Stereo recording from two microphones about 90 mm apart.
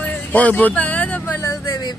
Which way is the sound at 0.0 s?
15° left (ahead or behind).